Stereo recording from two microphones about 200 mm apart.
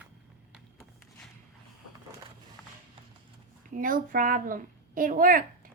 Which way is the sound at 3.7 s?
45° right (ahead or behind).